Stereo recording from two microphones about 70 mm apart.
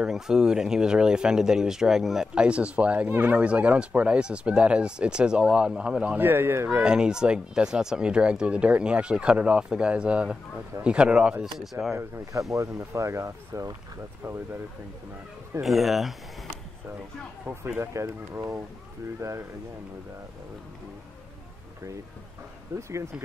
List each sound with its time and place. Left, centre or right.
0.0 s speech: centre
6.1 s speech: right
6.8 s speech: centre
11.5 s speech: centre
12.0 s speech: right
15.6 s speech: centre
17.6 s speech: right
22.8 s speech: right